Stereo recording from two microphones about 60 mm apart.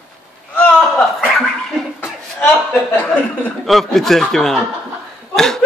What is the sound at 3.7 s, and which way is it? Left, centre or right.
Speech, centre.